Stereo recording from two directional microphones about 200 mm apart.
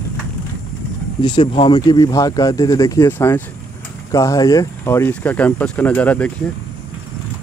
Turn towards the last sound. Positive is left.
turn(degrees=5)  # may be behind; listen again after turning